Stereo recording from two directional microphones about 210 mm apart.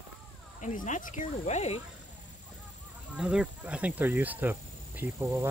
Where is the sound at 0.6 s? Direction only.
35° left (ahead or behind).